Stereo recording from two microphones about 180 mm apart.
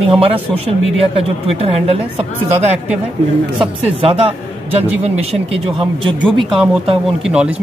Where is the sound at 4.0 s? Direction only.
30° right (ahead or behind).